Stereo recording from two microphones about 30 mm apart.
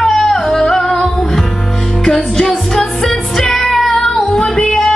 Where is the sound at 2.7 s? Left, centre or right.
Centre.